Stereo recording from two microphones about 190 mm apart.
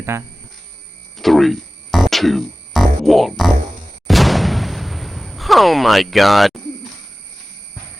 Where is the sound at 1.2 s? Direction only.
Centre (ahead or behind).